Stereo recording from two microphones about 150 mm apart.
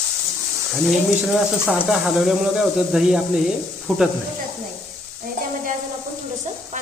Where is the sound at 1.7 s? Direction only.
5° right (ahead or behind).